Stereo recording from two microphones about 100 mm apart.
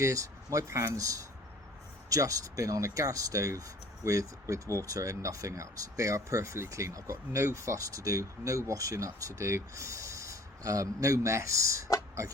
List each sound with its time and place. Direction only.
0.0 s speech: 30° right (ahead or behind)
12.2 s pig: 30° right (ahead or behind)